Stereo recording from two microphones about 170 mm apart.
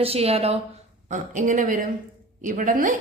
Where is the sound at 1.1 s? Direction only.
50° right (ahead or behind).